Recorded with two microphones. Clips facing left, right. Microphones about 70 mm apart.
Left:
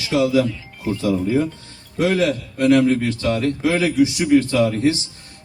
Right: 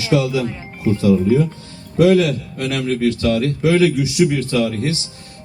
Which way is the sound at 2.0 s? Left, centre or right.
Left.